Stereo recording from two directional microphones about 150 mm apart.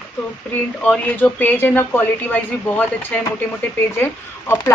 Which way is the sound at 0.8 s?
10° left (ahead or behind).